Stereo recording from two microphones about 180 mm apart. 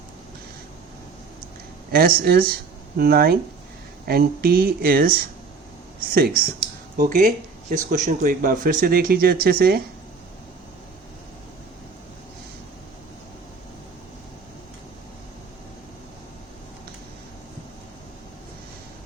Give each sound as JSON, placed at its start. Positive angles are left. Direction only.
{"t": 1.9, "sound": "speech", "side_deg": -55}